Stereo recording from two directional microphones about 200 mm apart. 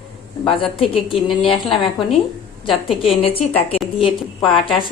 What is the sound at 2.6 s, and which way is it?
Speech, 30° left (ahead or behind).